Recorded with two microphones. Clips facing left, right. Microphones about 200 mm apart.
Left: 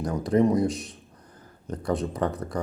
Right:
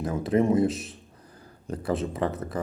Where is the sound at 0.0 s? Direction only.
5° right (ahead or behind).